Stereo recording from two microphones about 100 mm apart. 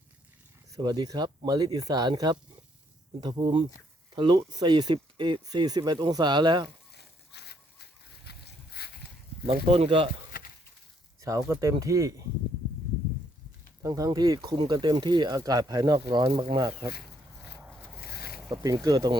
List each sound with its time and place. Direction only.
0.8 s speech: 45° right (ahead or behind)
9.5 s speech: 75° right (ahead or behind)
11.2 s speech: 35° right (ahead or behind)
13.8 s speech: 35° right (ahead or behind)
18.4 s speech: 40° right (ahead or behind)